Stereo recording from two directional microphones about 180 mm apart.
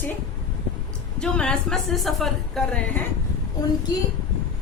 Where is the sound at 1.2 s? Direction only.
5° left (ahead or behind).